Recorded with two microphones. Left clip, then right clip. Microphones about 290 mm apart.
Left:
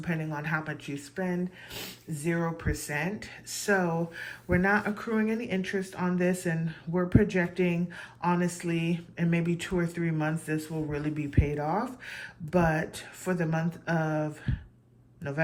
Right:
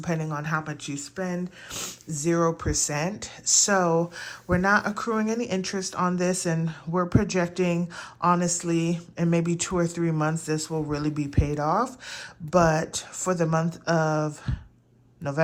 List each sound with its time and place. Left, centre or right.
0.0 s speech: centre